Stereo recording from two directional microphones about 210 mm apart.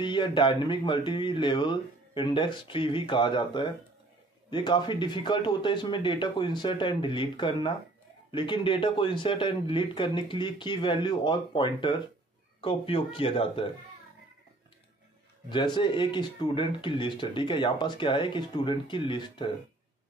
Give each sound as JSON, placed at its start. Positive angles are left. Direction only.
{"t": 0.0, "sound": "speech", "side_deg": 20}
{"t": 15.5, "sound": "speech", "side_deg": 20}